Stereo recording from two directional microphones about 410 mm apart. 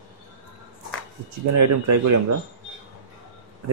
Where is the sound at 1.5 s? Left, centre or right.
Right.